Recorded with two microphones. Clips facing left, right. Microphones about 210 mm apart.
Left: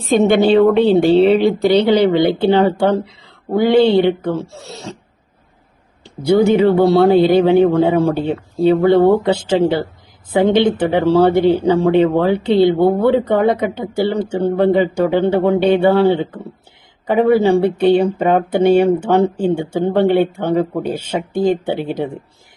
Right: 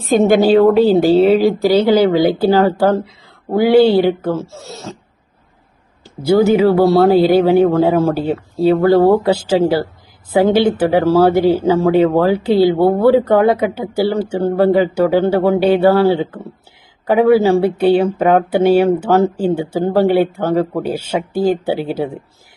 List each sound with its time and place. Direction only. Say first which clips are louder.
0.0 s speech: right 1 dB; centre (ahead or behind)
6.0 s speech: right 1 dB; 5° right (ahead or behind)